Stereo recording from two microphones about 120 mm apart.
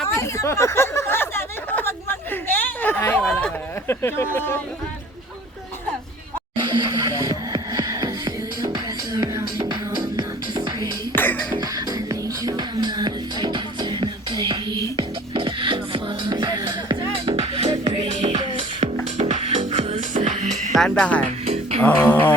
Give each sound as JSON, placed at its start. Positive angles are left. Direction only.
{"t": 0.2, "sound": "a sound", "side_deg": 25}
{"t": 3.0, "sound": "chatter", "side_deg": 15}
{"t": 3.3, "sound": "a sound", "side_deg": 20}
{"t": 6.6, "sound": "music", "side_deg": -40}
{"t": 11.1, "sound": "music", "side_deg": 15}
{"t": 11.5, "sound": "music", "side_deg": -30}
{"t": 17.3, "sound": "music", "side_deg": -55}
{"t": 20.7, "sound": "speech", "side_deg": 5}
{"t": 21.4, "sound": "music", "side_deg": -60}
{"t": 21.9, "sound": "speech", "side_deg": 20}